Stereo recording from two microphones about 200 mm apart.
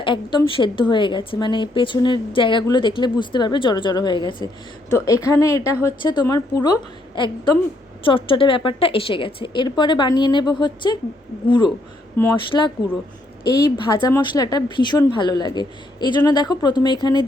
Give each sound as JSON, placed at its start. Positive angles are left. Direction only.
{"t": 0.0, "sound": "a woman's voice", "side_deg": 25}
{"t": 8.0, "sound": "a woman's voice", "side_deg": 25}